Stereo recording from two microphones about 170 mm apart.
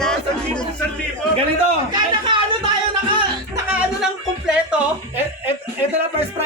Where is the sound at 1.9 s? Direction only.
25° right (ahead or behind).